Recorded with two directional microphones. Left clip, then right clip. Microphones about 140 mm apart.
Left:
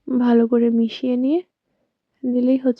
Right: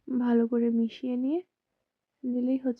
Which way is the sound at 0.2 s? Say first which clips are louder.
Left 10 dB; 30° left (ahead or behind).